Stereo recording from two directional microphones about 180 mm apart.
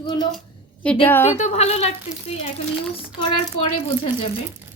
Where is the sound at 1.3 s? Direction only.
40° left (ahead or behind).